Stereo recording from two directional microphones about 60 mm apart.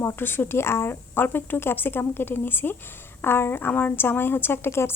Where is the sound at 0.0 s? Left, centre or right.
Left.